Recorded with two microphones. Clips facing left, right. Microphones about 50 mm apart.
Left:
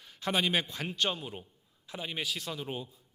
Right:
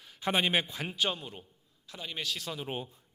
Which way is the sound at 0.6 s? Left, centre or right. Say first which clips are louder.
Even; centre.